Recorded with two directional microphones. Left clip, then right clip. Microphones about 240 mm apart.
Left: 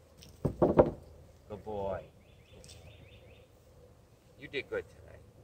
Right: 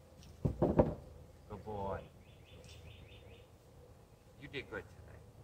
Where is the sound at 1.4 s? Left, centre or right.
Left.